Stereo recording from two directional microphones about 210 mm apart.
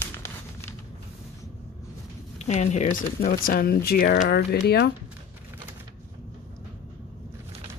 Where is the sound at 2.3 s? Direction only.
30° left (ahead or behind); by 4.9 s 50° left (ahead or behind).